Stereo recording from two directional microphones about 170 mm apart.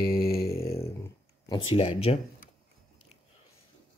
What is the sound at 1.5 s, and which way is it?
Speech, 30° left (ahead or behind).